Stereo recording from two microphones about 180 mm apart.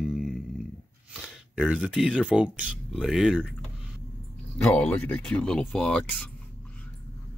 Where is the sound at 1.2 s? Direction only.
Centre (ahead or behind).